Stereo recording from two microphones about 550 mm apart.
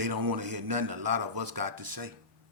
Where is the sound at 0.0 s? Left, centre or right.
Right.